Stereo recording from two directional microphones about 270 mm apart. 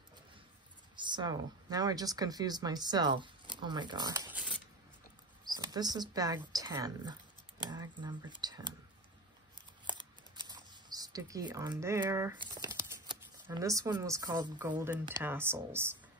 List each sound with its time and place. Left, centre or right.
0.9 s speech: centre
5.5 s speech: centre
9.8 s a sound: centre
13.5 s speech: centre